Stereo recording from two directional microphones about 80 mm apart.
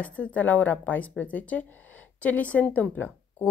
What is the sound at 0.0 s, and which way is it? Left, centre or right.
A woman's voice, centre.